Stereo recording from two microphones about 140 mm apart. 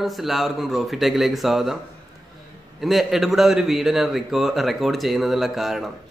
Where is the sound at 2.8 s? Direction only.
Centre (ahead or behind).